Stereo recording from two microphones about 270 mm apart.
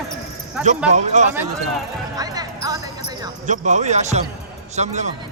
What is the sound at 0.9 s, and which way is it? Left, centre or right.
Speech, right.